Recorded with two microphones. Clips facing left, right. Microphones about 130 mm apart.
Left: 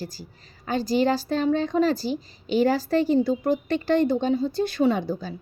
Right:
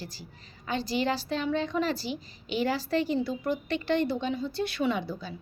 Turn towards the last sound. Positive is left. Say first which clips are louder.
# left 7 dB
turn(degrees=45)  # may be behind; listen again after turning